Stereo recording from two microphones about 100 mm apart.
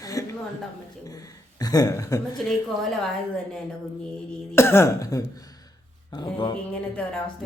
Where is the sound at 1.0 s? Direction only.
40° left (ahead or behind).